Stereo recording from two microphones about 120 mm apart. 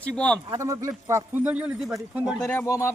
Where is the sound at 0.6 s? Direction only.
25° right (ahead or behind).